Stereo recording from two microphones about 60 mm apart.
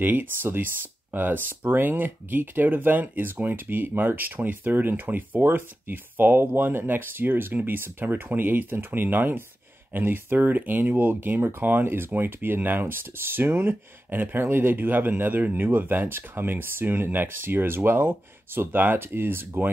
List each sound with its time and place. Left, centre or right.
0.0 s speech: right